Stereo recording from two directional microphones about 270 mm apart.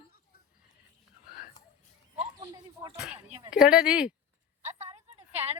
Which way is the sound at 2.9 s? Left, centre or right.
Centre.